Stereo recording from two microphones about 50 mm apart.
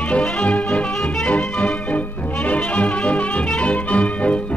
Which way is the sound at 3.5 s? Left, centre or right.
Left.